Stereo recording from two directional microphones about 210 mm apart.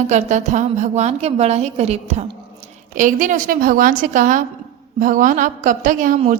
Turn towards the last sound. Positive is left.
turn(degrees=-35)  # may be behind; listen again after turning